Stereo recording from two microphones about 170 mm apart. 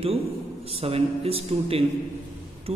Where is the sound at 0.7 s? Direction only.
35° right (ahead or behind).